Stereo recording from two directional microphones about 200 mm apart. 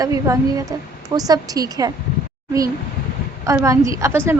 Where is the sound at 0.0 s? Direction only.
15° right (ahead or behind).